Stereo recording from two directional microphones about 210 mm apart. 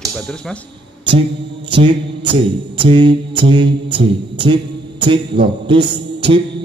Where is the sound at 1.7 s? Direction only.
25° right (ahead or behind).